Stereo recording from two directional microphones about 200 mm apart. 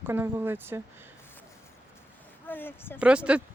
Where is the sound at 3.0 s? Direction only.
5° right (ahead or behind).